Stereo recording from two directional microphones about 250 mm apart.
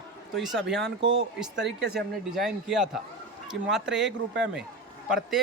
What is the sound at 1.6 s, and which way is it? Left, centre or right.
Speech, right.